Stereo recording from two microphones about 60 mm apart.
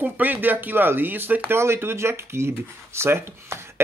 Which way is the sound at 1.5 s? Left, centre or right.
Right.